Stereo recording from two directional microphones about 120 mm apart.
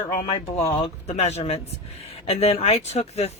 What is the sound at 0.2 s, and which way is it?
Speech, 45° left (ahead or behind).